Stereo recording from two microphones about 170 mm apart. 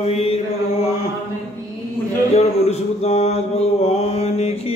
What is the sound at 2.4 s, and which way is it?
Mantra, 40° left (ahead or behind).